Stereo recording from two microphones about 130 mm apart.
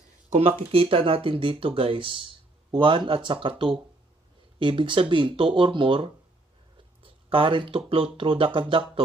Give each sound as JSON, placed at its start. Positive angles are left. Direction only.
{"t": 0.3, "sound": "speech", "side_deg": -55}